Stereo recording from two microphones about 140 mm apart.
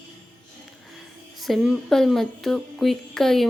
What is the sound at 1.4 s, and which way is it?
Speech, centre (ahead or behind).